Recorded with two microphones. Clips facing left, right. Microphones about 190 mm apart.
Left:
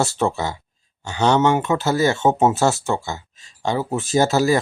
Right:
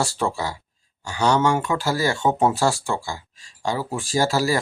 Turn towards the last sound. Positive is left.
turn(degrees=20)  # may be behind; listen again after turning